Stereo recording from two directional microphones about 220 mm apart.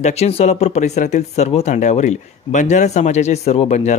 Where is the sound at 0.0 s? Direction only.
30° left (ahead or behind).